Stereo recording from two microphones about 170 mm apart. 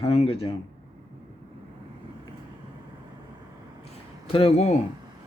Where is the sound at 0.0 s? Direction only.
35° left (ahead or behind).